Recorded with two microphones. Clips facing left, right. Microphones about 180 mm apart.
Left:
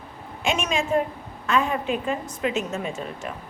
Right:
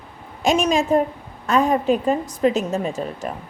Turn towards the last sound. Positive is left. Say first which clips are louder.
# right 5 dB
turn(degrees=-35)  # may be behind; listen again after turning